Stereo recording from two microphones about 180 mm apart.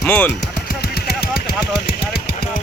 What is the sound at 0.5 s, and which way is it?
Machine gun, 60° left (ahead or behind).